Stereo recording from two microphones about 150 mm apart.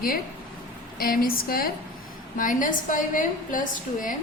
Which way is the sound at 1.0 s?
70° left (ahead or behind).